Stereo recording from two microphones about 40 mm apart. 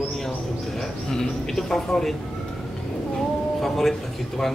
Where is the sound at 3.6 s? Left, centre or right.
Centre.